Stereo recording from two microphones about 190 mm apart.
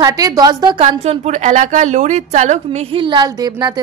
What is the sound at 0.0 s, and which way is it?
Speech, 20° right (ahead or behind).